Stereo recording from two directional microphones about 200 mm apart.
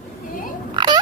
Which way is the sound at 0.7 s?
20° right (ahead or behind).